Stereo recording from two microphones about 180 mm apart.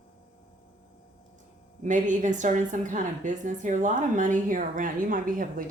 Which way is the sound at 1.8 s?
45° right (ahead or behind).